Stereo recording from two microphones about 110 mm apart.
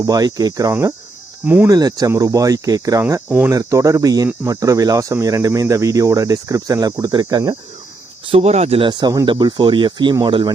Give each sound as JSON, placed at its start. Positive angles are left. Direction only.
{"t": 0.0, "sound": "speech", "side_deg": -35}
{"t": 8.3, "sound": "speech", "side_deg": -75}
{"t": 8.8, "sound": "speech", "side_deg": -40}